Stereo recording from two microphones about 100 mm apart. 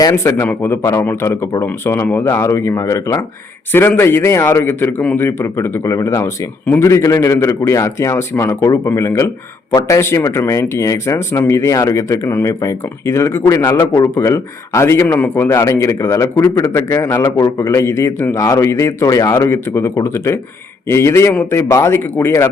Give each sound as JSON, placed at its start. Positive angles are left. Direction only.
{"t": 0.0, "sound": "speech", "side_deg": 30}
{"t": 15.0, "sound": "speech", "side_deg": 20}